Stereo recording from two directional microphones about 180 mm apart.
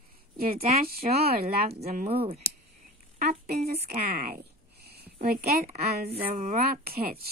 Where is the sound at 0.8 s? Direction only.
60° right (ahead or behind).